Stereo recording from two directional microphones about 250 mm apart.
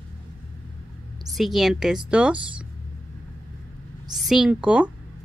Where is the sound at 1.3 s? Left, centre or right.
Centre.